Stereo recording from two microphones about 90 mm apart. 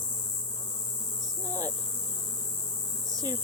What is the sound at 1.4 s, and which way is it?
Insect, 40° right (ahead or behind).